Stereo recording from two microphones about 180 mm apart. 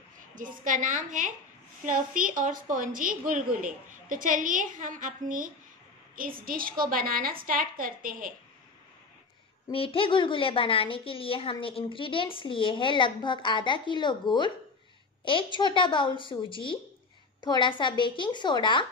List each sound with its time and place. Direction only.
0.4 s a woman's voice: 45° right (ahead or behind)
9.7 s a woman's voice: 30° left (ahead or behind)